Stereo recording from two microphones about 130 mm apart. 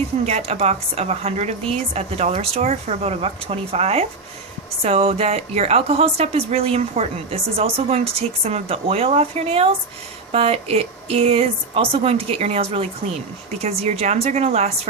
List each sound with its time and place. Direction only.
0.3 s a woman's voice: 55° right (ahead or behind)